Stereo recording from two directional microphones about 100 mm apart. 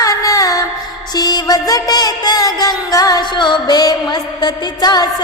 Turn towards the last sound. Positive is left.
turn(degrees=40)  # may be behind; listen again after turning